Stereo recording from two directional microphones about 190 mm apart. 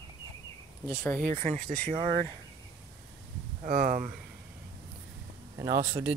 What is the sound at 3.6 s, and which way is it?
Speech, 45° right (ahead or behind).